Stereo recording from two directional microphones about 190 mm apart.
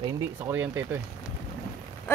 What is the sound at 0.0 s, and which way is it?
Speech, 15° right (ahead or behind).